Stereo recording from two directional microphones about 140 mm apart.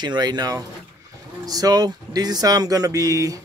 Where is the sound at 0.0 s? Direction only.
30° right (ahead or behind).